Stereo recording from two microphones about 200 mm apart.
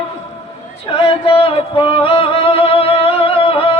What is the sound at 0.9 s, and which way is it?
Music, 30° left (ahead or behind).